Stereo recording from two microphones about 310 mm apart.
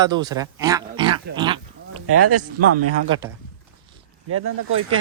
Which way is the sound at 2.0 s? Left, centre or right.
Right.